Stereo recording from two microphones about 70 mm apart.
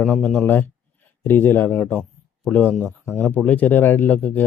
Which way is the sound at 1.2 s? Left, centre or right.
Left.